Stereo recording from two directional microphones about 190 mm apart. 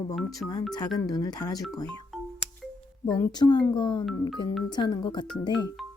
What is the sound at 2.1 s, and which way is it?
Music, centre (ahead or behind).